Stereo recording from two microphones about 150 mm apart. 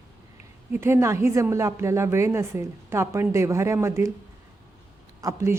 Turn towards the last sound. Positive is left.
turn(degrees=-20)  # may be behind; listen again after turning